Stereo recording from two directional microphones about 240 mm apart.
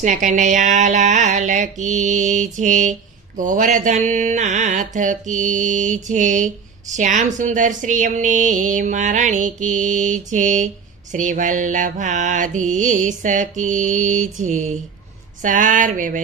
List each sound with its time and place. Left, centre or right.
0.0 s speech: right